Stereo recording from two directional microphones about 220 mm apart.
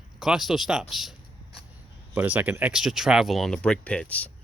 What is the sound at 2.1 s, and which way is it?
Speech, 10° right (ahead or behind).